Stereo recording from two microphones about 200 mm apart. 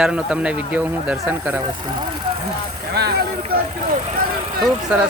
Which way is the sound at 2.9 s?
55° right (ahead or behind).